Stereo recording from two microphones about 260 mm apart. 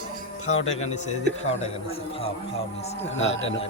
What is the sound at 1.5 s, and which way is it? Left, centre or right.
A man's voice, left.